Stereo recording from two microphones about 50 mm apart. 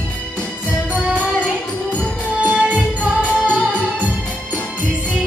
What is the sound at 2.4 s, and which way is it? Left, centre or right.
Music, right.